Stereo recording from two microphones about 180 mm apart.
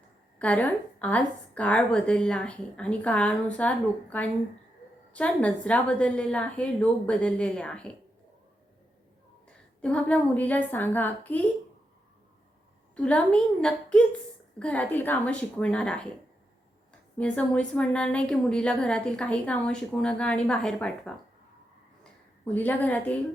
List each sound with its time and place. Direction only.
0.3 s a woman's voice: 5° left (ahead or behind)
9.5 s a woman's voice: 5° left (ahead or behind)
13.0 s a woman's voice: 5° left (ahead or behind)
17.2 s a woman's voice: 5° left (ahead or behind)